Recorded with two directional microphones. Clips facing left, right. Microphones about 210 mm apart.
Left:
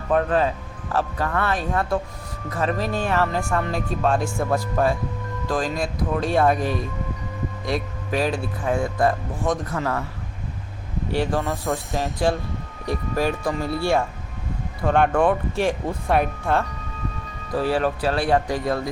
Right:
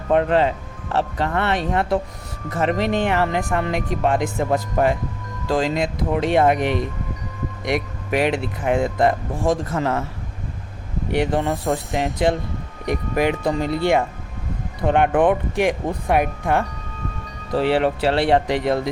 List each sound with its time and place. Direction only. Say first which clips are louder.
0.1 s speech: right 3 dB; 25° right (ahead or behind)
11.1 s speech: right 3 dB; 20° right (ahead or behind)
17.7 s speech: right 3 dB; 25° right (ahead or behind)